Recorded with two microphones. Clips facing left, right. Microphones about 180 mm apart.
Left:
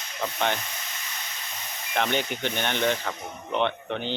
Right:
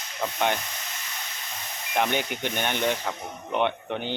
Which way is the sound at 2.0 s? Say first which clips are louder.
Right 1 dB; 10° right (ahead or behind).